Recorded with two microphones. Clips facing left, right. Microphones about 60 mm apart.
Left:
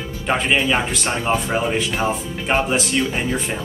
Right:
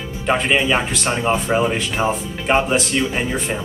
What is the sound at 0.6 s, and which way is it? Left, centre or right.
Speech, centre.